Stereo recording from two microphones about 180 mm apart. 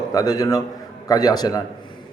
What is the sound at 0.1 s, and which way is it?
A man's voice, 20° left (ahead or behind).